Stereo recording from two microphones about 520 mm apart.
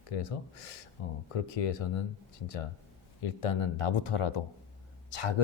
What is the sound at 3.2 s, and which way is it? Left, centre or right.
Speech, left.